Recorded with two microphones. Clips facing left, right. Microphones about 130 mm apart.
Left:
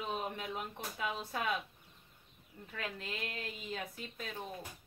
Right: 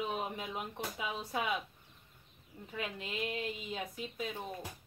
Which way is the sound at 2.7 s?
15° right (ahead or behind).